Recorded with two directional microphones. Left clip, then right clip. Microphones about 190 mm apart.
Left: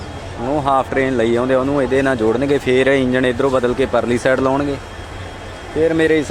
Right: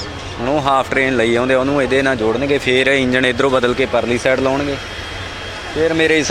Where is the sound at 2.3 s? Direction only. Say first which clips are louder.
Even; 30° left (ahead or behind).